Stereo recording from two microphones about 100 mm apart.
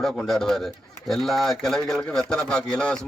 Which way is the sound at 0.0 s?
5° left (ahead or behind).